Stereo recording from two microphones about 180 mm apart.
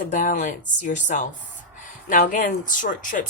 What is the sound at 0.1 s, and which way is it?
Speech, 45° left (ahead or behind).